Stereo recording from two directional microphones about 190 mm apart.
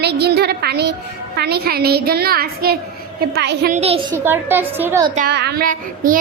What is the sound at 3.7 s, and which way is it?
Speech, 30° right (ahead or behind).